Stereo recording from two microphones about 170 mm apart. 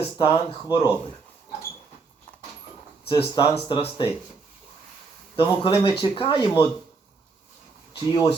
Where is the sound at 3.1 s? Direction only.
30° left (ahead or behind).